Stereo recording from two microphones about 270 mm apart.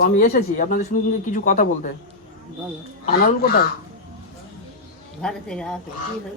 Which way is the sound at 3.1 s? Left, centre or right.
Left.